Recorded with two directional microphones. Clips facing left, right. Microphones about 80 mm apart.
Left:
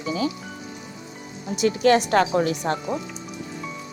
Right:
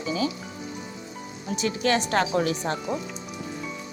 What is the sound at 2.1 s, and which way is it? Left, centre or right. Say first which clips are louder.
Speech: left 4 dB; left.